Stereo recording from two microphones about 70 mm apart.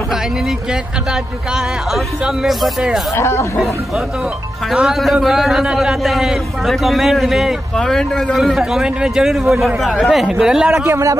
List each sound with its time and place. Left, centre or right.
1.5 s a man's voice: centre
3.2 s speech: left
4.7 s a man's voice: centre
7.7 s a man's voice: centre
10.7 s speech: right